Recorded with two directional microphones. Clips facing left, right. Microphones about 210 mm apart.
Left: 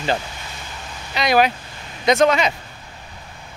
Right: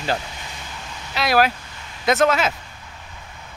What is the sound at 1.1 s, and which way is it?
Speech, centre (ahead or behind).